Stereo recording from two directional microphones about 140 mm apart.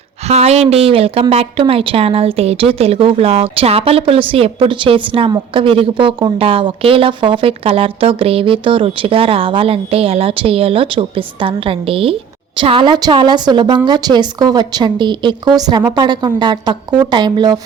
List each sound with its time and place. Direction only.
0.3 s speech: 50° right (ahead or behind); by 17.6 s 30° right (ahead or behind)